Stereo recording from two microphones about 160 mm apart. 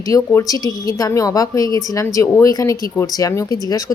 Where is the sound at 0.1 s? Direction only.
20° left (ahead or behind).